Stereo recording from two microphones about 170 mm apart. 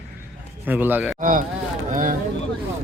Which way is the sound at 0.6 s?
10° right (ahead or behind).